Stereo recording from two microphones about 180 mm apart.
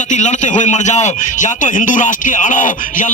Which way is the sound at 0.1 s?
40° left (ahead or behind).